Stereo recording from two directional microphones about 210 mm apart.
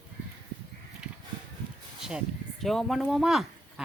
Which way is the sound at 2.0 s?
Centre (ahead or behind).